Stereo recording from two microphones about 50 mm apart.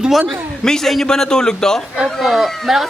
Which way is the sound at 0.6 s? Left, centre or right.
Centre.